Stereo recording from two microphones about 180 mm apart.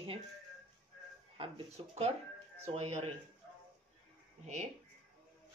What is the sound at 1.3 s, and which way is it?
Speech, 35° right (ahead or behind).